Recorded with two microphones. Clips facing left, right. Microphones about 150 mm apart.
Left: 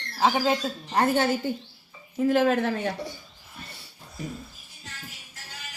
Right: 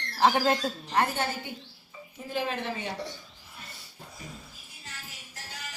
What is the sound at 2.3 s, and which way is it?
Speech, 90° left.